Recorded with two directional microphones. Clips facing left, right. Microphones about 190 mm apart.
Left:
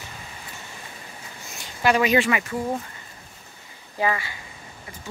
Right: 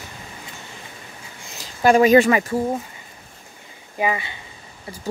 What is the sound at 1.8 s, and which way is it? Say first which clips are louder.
Speech: right 7 dB; 45° right (ahead or behind).